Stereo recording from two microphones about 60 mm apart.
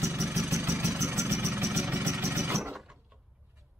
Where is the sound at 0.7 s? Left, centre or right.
Right.